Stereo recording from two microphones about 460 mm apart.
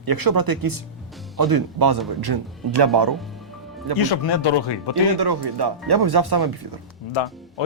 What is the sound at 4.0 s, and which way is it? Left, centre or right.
Speech, left.